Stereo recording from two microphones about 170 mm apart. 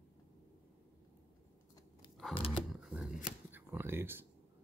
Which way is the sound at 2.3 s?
30° left (ahead or behind).